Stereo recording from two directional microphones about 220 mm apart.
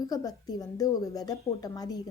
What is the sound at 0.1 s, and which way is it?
A woman's voice, 15° left (ahead or behind).